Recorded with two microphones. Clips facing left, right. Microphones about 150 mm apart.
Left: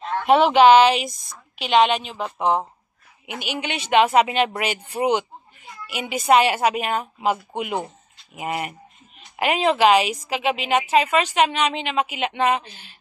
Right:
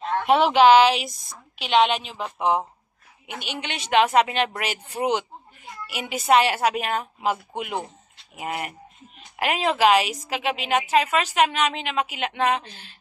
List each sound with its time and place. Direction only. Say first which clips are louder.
0.2 s a woman's voice: left 3 dB; centre (ahead or behind)